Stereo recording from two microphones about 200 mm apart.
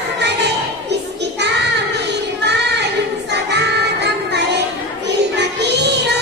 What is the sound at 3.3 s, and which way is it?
Music, 55° right (ahead or behind).